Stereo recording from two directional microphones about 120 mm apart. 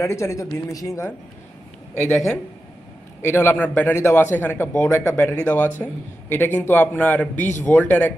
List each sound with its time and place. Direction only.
0.0 s speech: 25° left (ahead or behind)
2.0 s speech: 5° left (ahead or behind)
3.2 s speech: 20° left (ahead or behind)